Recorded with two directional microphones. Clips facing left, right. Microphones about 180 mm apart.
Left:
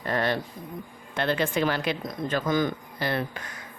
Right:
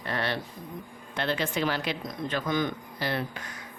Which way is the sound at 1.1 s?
50° left (ahead or behind).